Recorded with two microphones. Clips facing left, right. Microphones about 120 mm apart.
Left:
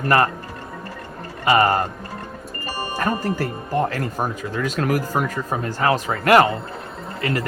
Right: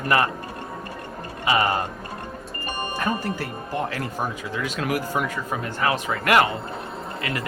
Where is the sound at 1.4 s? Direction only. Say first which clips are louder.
Left 5 dB; 50° left (ahead or behind).